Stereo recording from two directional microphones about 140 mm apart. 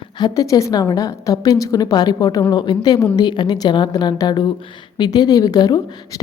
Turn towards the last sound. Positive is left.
turn(degrees=30)  # may be behind; listen again after turning